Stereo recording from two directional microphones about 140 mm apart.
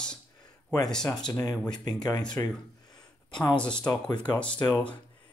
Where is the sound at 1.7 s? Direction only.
30° left (ahead or behind).